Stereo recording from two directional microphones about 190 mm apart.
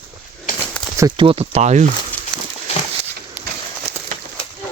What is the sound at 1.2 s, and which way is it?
Speech, 30° right (ahead or behind).